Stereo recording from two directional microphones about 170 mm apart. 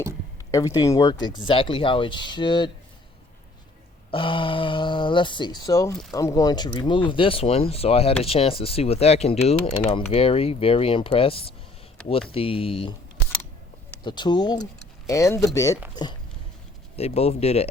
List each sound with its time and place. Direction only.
0.5 s speech: 20° left (ahead or behind)
4.1 s speech: 30° left (ahead or behind)
14.0 s speech: 25° left (ahead or behind)
17.0 s speech: 35° left (ahead or behind)